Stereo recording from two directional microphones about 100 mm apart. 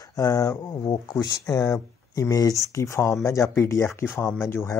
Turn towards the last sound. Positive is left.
turn(degrees=25)  # may be behind; listen again after turning